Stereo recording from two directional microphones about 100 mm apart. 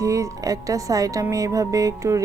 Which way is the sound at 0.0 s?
35° right (ahead or behind).